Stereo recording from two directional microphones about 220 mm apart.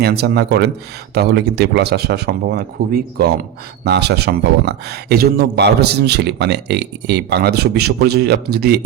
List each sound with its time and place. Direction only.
0.0 s speech: 50° right (ahead or behind)